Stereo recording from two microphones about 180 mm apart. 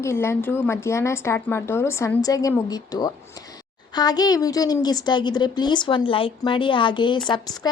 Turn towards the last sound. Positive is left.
turn(degrees=20)  # may be behind; listen again after turning